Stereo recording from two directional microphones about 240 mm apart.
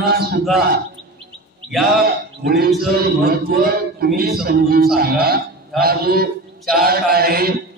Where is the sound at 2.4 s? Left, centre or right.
Right.